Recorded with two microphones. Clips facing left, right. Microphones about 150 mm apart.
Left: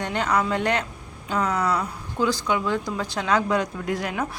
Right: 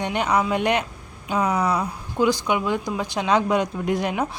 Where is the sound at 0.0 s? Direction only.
15° right (ahead or behind).